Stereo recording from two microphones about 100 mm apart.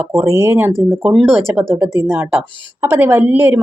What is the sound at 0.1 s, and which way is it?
Speech, 30° right (ahead or behind).